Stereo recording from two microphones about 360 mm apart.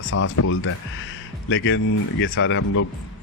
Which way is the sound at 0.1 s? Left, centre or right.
Left.